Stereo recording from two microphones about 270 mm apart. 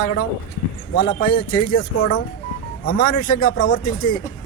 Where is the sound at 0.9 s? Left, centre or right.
Left.